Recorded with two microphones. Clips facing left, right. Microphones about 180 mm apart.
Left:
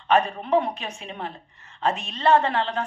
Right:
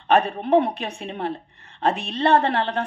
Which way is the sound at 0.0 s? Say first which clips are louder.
Right 2 dB; 60° right (ahead or behind).